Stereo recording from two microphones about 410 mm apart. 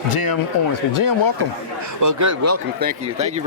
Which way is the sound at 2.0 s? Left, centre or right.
Right.